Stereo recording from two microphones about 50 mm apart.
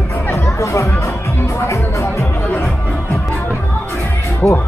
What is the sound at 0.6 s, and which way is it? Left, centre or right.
Music, left.